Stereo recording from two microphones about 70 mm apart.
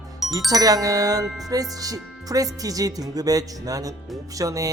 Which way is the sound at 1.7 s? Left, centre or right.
Right.